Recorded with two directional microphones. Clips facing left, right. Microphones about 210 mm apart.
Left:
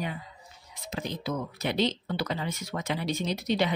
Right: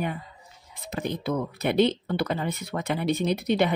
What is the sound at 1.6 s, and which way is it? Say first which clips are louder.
Speech: right 6 dB; 55° right (ahead or behind).